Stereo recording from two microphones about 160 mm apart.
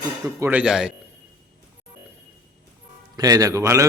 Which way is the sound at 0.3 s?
15° right (ahead or behind).